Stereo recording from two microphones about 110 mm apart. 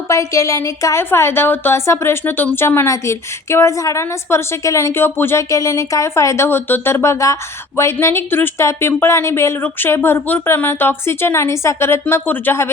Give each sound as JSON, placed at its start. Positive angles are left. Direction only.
{"t": 0.1, "sound": "a woman's voice", "side_deg": 30}